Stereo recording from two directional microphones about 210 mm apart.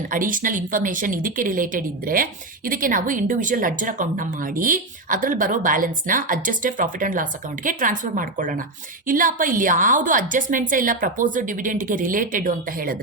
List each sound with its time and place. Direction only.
0.1 s a woman's voice: 40° right (ahead or behind)